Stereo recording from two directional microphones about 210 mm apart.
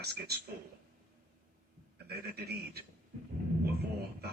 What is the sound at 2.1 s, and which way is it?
Speech, 50° right (ahead or behind).